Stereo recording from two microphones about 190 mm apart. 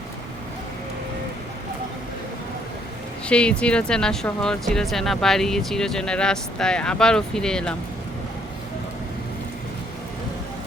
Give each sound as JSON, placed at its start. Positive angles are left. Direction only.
{"t": 3.2, "sound": "speech", "side_deg": 5}